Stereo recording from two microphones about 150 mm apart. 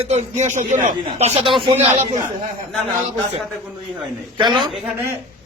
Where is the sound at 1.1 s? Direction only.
45° right (ahead or behind).